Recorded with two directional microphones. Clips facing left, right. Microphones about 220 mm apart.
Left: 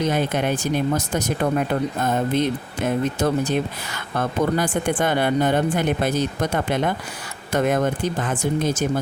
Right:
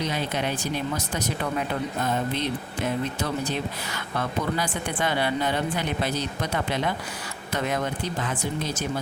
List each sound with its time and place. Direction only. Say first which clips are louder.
0.0 s speech: left 6 dB; 50° left (ahead or behind)